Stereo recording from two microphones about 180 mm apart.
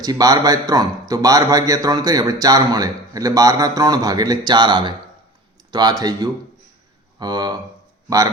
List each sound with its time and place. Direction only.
0.0 s a man's voice: 20° right (ahead or behind)